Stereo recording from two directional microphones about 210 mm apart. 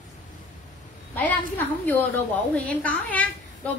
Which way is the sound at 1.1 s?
10° left (ahead or behind).